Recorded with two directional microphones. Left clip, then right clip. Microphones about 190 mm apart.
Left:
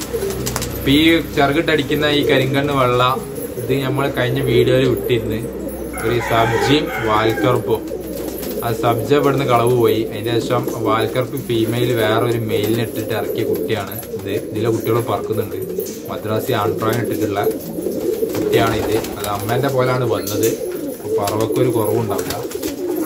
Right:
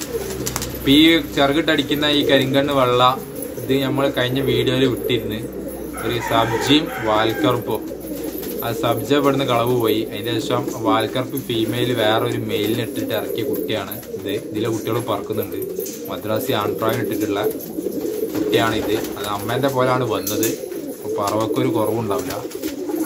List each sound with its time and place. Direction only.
0.8 s a man's voice: 25° right (ahead or behind)
8.6 s a man's voice: 25° right (ahead or behind)
14.6 s a man's voice: 30° right (ahead or behind)
16.3 s a man's voice: 30° right (ahead or behind)
19.6 s a man's voice: 30° right (ahead or behind)